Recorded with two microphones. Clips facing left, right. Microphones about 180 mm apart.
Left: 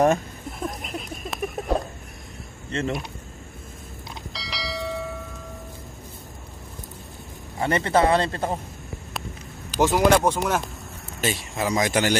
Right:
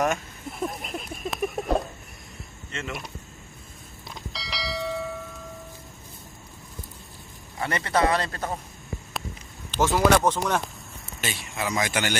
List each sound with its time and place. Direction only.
0.5 s a sound: centre (ahead or behind)
2.7 s speech: 35° left (ahead or behind)
4.3 s church bell: centre (ahead or behind)
7.5 s a man's voice: 25° left (ahead or behind)
9.8 s speech: 15° left (ahead or behind)
11.1 s speech: 35° left (ahead or behind)